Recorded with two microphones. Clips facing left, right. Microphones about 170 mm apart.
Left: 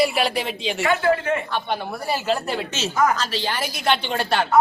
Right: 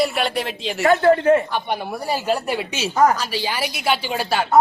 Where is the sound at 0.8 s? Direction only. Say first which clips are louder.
Right 6 dB; 40° right (ahead or behind).